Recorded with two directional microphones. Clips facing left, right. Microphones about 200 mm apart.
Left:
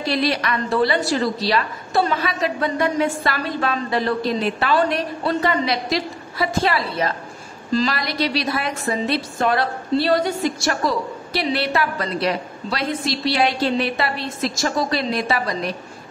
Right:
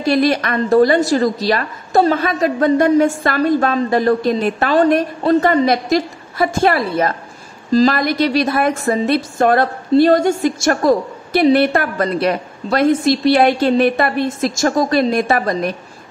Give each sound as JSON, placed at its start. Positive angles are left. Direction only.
{"t": 0.1, "sound": "a woman's voice", "side_deg": -50}